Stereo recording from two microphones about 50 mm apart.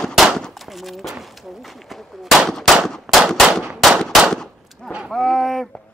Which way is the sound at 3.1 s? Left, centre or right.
Centre.